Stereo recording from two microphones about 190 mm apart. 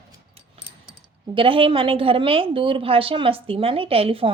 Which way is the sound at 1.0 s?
25° right (ahead or behind).